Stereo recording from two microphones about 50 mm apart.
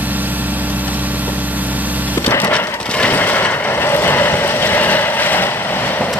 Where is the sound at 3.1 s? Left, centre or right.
Left.